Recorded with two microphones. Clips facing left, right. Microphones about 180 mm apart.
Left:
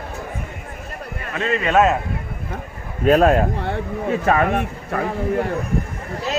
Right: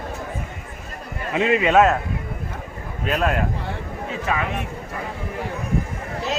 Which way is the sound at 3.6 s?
50° left (ahead or behind).